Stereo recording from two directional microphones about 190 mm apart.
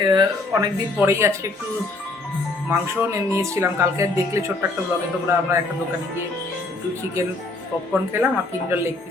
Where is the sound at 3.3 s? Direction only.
15° right (ahead or behind).